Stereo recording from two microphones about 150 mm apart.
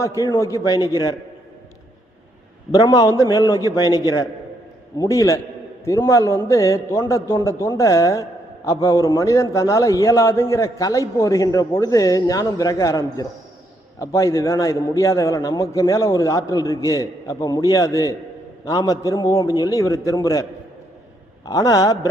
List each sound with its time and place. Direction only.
0.0 s a man's voice: 20° left (ahead or behind)
2.7 s a man's voice: 25° left (ahead or behind)